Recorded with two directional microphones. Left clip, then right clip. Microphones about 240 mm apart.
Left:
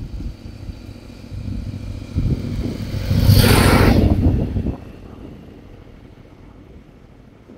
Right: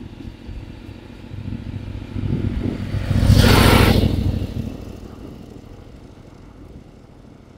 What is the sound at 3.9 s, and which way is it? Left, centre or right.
Vehicle, right.